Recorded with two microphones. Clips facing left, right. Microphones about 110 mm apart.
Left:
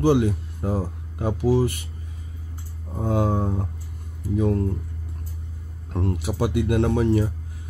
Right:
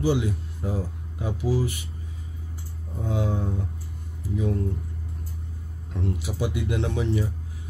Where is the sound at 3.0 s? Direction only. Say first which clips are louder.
Left 5 dB; 50° left (ahead or behind).